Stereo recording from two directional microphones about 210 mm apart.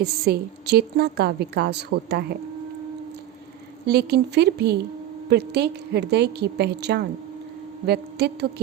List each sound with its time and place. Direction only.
0.0 s a woman's voice: 50° right (ahead or behind)
3.8 s a woman's voice: 50° right (ahead or behind)